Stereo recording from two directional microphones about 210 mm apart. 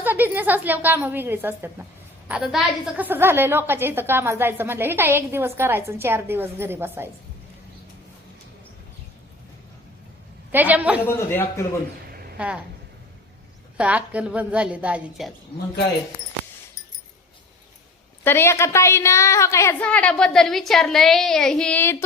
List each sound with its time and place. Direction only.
0.0 s a woman's voice: 10° right (ahead or behind)
10.5 s a woman's voice: 10° right (ahead or behind)
11.3 s a woman's voice: 10° left (ahead or behind)
12.1 s a sound: 45° right (ahead or behind)
13.7 s a woman's voice: 5° right (ahead or behind)
18.2 s a woman's voice: 10° left (ahead or behind)